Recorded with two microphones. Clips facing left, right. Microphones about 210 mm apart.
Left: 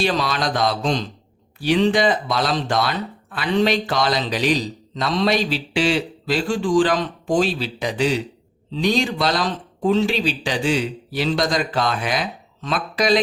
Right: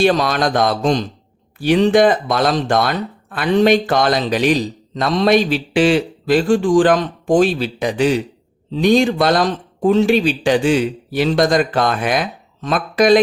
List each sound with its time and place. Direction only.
0.0 s speech: 50° right (ahead or behind)